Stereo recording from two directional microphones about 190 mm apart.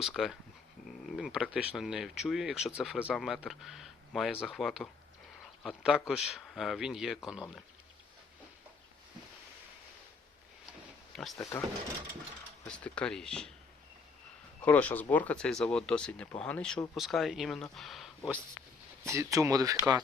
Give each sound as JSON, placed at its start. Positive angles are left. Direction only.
{"t": 0.0, "sound": "speech", "side_deg": 0}
{"t": 11.1, "sound": "speech", "side_deg": 0}
{"t": 11.3, "sound": "speech", "side_deg": 15}
{"t": 12.6, "sound": "speech", "side_deg": 5}
{"t": 14.6, "sound": "speech", "side_deg": 10}
{"t": 19.0, "sound": "speech", "side_deg": -15}